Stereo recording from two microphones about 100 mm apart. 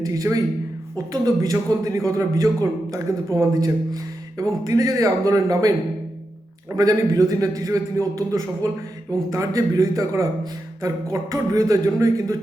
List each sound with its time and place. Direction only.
0.0 s a man's voice: 35° right (ahead or behind)
6.7 s a man's voice: 40° right (ahead or behind)